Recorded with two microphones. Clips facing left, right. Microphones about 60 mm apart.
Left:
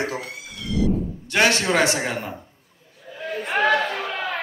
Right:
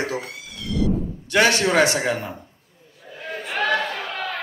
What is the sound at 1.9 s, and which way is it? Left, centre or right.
Speech, left.